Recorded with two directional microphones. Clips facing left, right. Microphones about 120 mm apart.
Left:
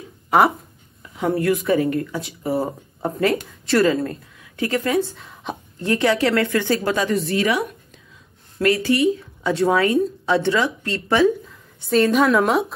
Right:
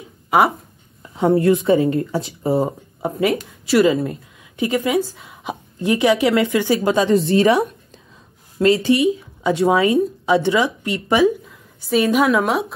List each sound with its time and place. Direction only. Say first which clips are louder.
0.3 s a woman's voice: even; 5° right (ahead or behind)
1.1 s speech: right 5 dB; 25° right (ahead or behind)
3.0 s speech: right 1 dB; 10° right (ahead or behind)
4.9 s a woman's voice: right 1 dB; 5° right (ahead or behind)